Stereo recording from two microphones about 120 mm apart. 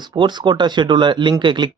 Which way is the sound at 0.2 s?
40° right (ahead or behind).